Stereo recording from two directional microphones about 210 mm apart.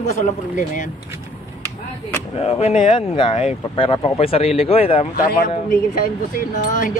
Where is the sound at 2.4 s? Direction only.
30° left (ahead or behind).